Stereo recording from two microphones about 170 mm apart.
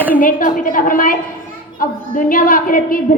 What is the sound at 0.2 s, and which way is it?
A child's voice, 55° left (ahead or behind).